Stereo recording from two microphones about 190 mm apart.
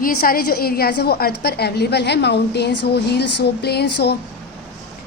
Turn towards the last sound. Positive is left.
turn(degrees=60)  # may be behind; listen again after turning